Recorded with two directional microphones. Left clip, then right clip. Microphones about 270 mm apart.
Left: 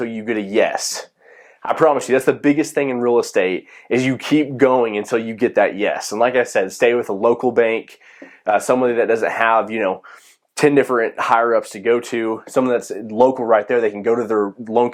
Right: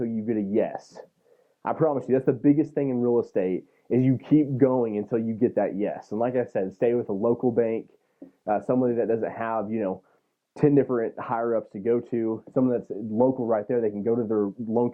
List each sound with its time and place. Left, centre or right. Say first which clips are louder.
0.0 s speech: left 6 dB; centre
13.1 s speech: left 9 dB; left
13.4 s speech: left 9 dB; centre